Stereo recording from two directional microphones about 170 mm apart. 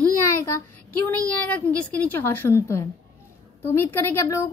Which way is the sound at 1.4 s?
10° left (ahead or behind).